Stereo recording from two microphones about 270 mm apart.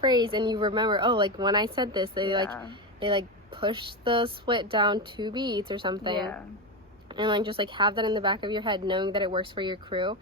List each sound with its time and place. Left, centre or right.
0.0 s a woman's voice: centre